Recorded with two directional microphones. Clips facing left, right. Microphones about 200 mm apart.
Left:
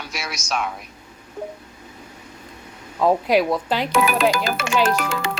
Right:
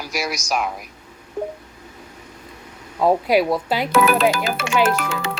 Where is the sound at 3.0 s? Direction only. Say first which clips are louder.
Right 1 dB; 5° right (ahead or behind).